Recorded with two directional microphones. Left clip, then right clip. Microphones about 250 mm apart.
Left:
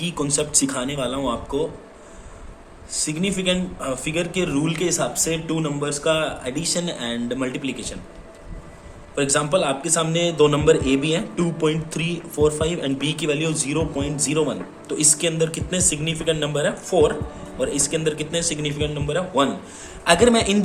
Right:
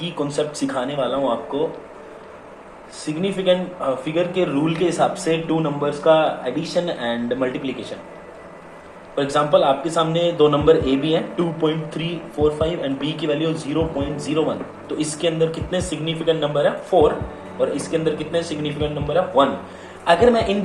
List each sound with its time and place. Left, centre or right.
0.0 s speech: left
3.1 s speech: left
9.1 s speech: left